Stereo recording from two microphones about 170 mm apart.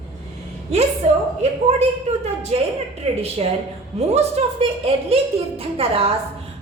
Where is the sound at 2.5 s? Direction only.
35° right (ahead or behind).